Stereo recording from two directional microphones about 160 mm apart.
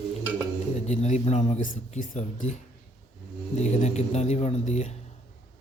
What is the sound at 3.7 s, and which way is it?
Speech, 45° left (ahead or behind).